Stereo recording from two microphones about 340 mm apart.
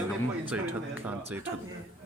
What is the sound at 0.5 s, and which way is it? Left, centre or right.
Speech, centre.